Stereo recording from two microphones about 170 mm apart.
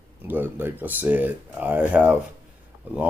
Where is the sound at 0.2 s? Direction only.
10° right (ahead or behind).